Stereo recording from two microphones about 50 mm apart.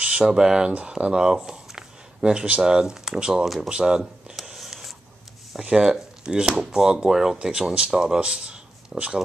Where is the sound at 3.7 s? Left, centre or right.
Centre.